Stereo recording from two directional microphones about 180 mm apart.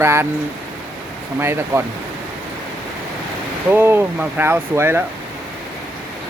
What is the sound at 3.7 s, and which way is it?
Speech, 10° right (ahead or behind).